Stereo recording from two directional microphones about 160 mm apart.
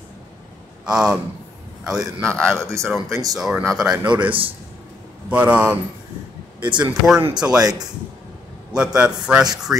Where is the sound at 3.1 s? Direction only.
20° right (ahead or behind).